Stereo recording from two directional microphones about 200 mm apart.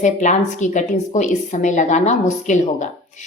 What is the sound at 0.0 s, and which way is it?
A woman's voice, 35° left (ahead or behind).